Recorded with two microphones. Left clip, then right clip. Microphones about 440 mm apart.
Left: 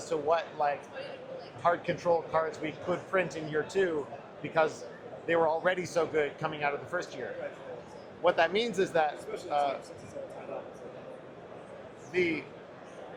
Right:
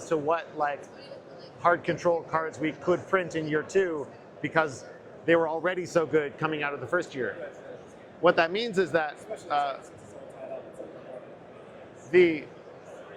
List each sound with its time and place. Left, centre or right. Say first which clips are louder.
0.1 s speech: right 2 dB; right
8.2 s speech: right 3 dB; right
12.1 s speech: right 9 dB; right